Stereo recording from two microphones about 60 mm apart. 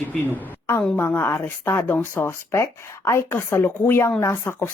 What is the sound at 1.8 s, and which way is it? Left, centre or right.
Speech, left.